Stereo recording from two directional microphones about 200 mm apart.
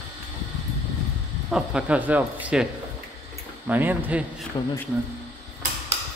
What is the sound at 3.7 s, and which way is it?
Speech, 10° right (ahead or behind).